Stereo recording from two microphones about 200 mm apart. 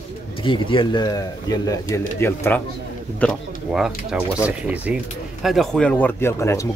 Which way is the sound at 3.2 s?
Centre (ahead or behind).